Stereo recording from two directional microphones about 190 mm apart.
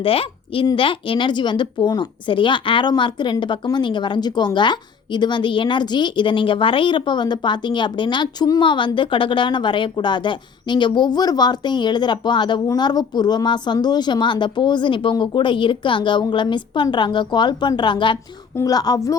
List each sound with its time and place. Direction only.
0.0 s a woman's voice: 30° left (ahead or behind)